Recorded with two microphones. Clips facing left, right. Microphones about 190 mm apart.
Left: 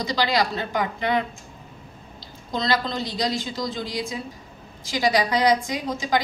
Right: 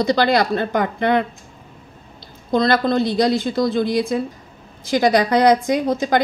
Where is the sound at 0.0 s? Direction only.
55° right (ahead or behind).